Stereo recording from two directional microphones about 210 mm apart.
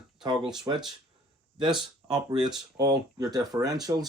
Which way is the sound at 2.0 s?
20° right (ahead or behind).